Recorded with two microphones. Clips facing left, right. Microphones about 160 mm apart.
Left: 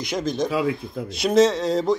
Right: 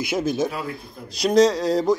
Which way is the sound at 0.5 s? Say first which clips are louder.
Left 7 dB; 90° left.